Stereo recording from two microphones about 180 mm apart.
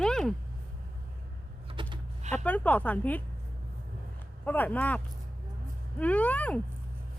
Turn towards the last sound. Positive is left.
turn(degrees=10)  # may be behind; listen again after turning